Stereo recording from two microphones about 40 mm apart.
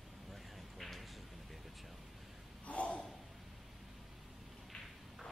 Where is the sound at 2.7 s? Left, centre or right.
Left.